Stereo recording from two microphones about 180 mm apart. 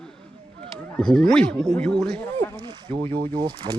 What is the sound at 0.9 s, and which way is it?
Speech, 5° left (ahead or behind).